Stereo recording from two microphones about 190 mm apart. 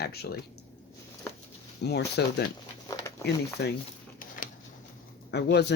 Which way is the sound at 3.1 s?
15° left (ahead or behind).